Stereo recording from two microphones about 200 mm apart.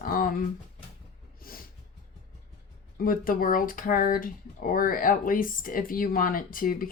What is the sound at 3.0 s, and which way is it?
Speech, 45° left (ahead or behind).